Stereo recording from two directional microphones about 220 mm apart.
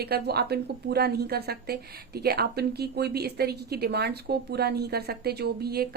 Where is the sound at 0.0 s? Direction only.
45° right (ahead or behind).